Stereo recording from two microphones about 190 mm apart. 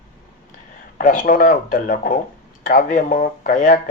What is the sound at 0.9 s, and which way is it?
Speech, 45° left (ahead or behind).